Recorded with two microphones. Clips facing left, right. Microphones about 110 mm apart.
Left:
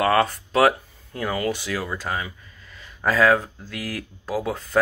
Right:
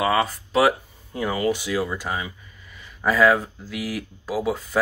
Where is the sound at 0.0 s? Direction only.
5° right (ahead or behind).